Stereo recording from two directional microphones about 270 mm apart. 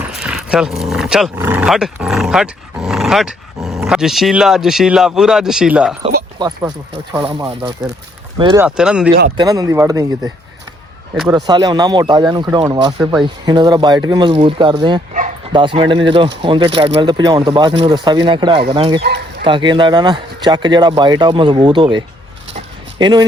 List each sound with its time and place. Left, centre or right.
0.1 s speech: centre
6.4 s speech: centre
8.6 s speech: centre
11.1 s speech: centre
11.3 s speech: centre
22.5 s a sound: centre